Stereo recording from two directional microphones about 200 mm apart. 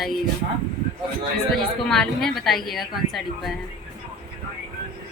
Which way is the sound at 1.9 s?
Centre (ahead or behind).